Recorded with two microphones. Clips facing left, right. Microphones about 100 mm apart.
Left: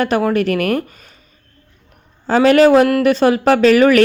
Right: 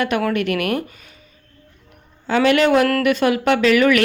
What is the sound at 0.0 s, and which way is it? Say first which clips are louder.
Speech: left 4 dB; 30° left (ahead or behind).